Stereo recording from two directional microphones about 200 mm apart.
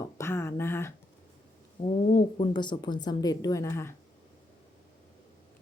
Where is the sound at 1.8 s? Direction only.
40° left (ahead or behind).